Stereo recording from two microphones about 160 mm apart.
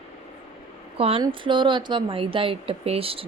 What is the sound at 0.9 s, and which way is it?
A woman's voice, 35° right (ahead or behind).